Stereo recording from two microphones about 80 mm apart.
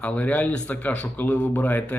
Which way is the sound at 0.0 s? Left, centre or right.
Centre.